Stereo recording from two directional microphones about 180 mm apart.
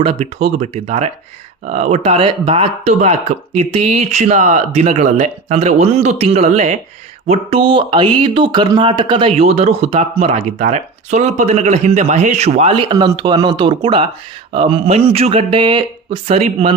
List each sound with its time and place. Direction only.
0.0 s speech: 35° right (ahead or behind)